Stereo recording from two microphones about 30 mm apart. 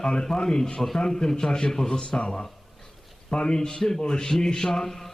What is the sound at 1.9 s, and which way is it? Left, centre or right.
A man's voice, left.